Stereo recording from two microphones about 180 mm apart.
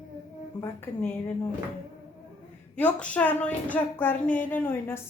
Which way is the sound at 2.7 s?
5° left (ahead or behind).